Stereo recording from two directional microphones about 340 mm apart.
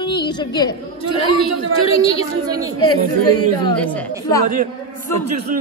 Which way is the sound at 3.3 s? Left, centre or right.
Centre.